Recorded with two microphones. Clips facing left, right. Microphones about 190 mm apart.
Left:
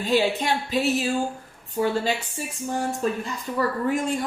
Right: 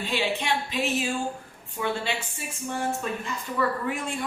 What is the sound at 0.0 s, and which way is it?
A woman's voice, 40° left (ahead or behind).